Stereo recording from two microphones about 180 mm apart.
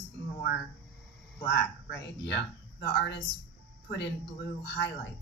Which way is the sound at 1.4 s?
65° left (ahead or behind).